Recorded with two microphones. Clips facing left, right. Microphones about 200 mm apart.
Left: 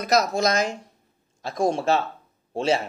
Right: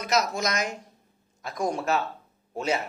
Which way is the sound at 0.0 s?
35° left (ahead or behind).